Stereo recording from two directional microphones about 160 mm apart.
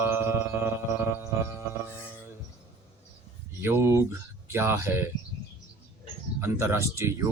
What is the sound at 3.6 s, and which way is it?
Mantra, 15° right (ahead or behind).